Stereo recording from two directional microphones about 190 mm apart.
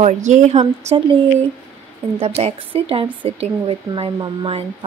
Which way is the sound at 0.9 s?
25° right (ahead or behind).